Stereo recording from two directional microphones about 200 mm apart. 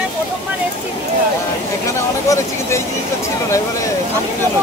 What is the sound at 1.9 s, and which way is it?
Speech, 15° left (ahead or behind).